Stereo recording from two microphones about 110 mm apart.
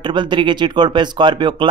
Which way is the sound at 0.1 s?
45° right (ahead or behind).